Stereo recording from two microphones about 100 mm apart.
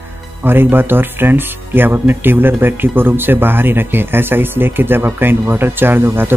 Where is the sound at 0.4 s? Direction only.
20° right (ahead or behind).